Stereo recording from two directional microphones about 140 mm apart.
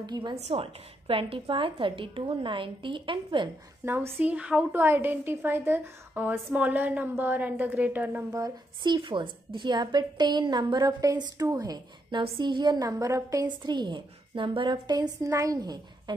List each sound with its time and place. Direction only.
0.0 s a woman's voice: 30° right (ahead or behind)
0.4 s a woman's voice: 45° right (ahead or behind)
3.8 s a woman's voice: 15° right (ahead or behind)
8.3 s a woman's voice: 30° right (ahead or behind)